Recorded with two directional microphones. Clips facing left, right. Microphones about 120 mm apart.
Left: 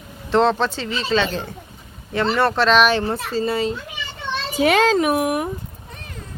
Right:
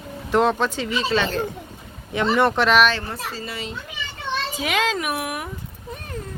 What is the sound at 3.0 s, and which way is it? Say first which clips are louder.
A child's voice: left 9 dB; 30° left (ahead or behind).